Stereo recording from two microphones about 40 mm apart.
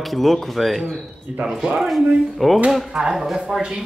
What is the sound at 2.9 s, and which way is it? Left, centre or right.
Speech, right.